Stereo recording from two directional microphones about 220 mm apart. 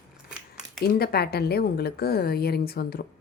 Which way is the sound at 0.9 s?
45° left (ahead or behind).